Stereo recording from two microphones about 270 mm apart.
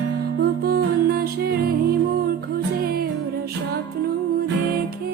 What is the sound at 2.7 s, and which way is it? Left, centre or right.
Music, right.